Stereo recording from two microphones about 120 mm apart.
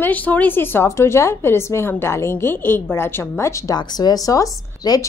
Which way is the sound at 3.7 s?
35° left (ahead or behind).